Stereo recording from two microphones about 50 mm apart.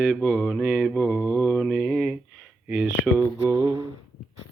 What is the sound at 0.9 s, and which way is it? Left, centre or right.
Speech, centre.